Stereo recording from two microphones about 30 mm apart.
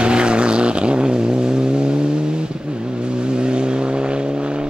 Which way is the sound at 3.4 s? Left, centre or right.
Right.